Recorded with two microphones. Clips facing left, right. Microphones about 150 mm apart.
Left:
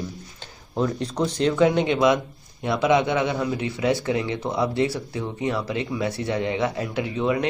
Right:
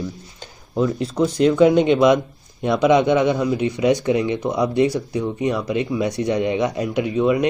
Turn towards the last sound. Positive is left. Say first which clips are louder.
# right 6 dB
turn(degrees=-15)  # may be behind; listen again after turning